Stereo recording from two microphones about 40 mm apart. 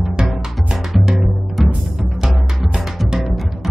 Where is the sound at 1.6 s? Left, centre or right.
Centre.